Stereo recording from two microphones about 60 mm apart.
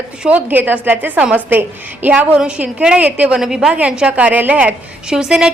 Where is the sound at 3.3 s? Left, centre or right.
Centre.